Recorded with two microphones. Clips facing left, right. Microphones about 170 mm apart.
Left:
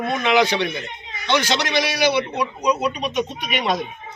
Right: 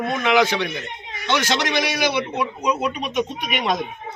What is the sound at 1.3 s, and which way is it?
Speech, 15° left (ahead or behind).